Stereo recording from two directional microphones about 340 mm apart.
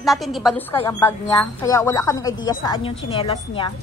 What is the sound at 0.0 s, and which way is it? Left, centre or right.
A woman's voice, centre.